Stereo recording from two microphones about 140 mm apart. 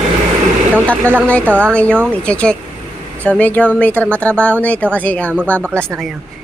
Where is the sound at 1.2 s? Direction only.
10° left (ahead or behind).